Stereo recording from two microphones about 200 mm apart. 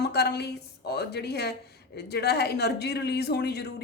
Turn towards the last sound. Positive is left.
turn(degrees=55)  # may be behind; listen again after turning